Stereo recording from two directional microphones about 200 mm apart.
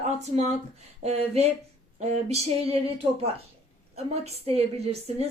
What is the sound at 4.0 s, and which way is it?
Speech, 30° right (ahead or behind).